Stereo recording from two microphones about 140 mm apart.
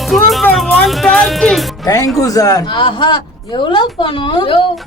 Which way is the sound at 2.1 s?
25° left (ahead or behind).